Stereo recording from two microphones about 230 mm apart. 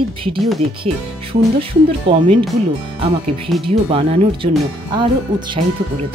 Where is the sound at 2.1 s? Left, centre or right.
Right.